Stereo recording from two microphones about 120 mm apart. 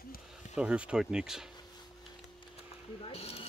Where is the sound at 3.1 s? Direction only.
55° left (ahead or behind).